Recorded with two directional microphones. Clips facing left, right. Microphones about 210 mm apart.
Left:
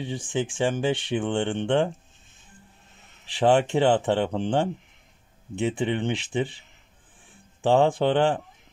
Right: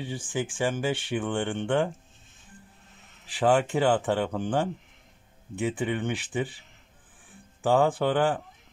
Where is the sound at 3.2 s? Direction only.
25° left (ahead or behind).